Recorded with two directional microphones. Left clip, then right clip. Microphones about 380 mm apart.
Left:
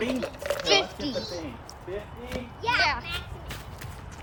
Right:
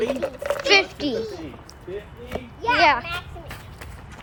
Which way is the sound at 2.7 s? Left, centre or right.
Centre.